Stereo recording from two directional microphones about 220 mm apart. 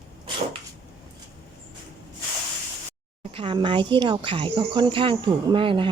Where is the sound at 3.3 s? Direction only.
25° right (ahead or behind).